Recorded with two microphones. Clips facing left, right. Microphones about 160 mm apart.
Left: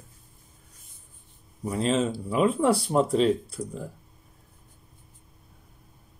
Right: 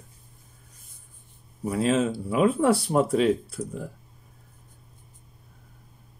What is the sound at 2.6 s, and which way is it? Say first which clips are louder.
Speech: right 1 dB; centre (ahead or behind).